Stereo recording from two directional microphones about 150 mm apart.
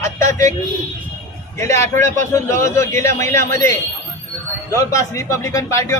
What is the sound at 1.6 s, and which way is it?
Speech, 20° left (ahead or behind).